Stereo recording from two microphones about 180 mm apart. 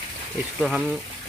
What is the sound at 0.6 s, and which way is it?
Speech, centre (ahead or behind).